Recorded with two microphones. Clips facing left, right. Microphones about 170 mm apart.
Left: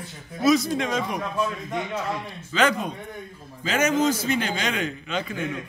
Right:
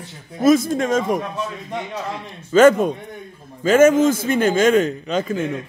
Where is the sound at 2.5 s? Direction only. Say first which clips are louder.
Right 11 dB; 45° right (ahead or behind).